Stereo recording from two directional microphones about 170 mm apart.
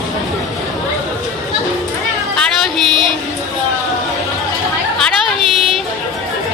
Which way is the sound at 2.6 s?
Centre (ahead or behind).